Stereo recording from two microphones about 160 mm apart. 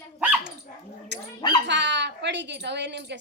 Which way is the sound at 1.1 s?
90° right.